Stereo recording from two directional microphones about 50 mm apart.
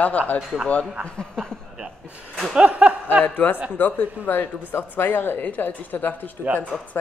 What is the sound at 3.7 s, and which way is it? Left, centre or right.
Speech, left.